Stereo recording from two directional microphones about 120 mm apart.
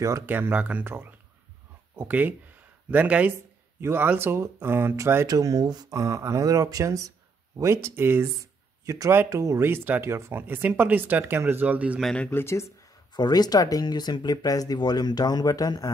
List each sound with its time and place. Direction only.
0.3 s speech: 15° right (ahead or behind)
12.0 s speech: 5° left (ahead or behind)
12.3 s speech: 20° left (ahead or behind)
12.8 s speech: 35° left (ahead or behind)